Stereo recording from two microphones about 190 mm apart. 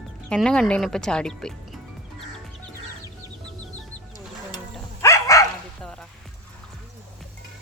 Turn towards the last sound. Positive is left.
turn(degrees=5)  # may be behind; listen again after turning